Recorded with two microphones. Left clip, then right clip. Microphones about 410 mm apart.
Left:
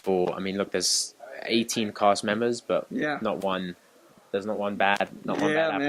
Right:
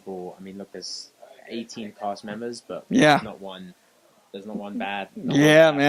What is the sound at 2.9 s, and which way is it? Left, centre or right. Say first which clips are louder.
Speech: right 12 dB; right.